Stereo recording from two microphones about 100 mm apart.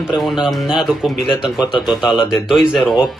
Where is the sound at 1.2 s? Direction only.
60° left (ahead or behind).